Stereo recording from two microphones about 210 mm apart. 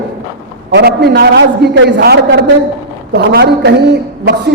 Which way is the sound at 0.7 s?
50° right (ahead or behind).